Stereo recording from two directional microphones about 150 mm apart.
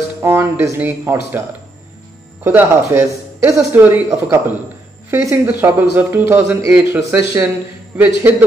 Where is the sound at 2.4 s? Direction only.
15° right (ahead or behind).